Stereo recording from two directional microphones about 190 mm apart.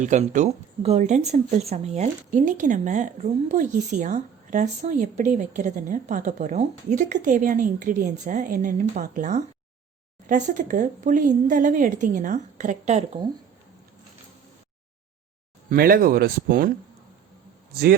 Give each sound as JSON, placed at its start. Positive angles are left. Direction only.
{"t": 0.0, "sound": "speech", "side_deg": -40}
{"t": 15.7, "sound": "speech", "side_deg": -50}